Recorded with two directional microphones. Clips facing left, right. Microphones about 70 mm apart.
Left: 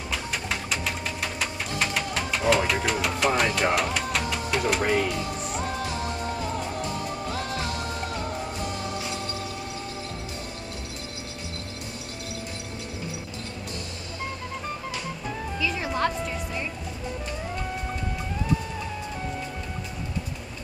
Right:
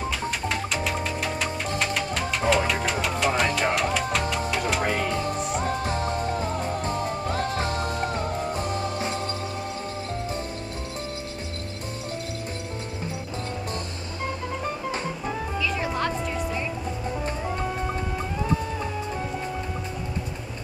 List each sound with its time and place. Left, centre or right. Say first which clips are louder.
0.1 s music: right 3 dB; centre
8.9 s music: right 3 dB; right
15.6 s music: left 2 dB; centre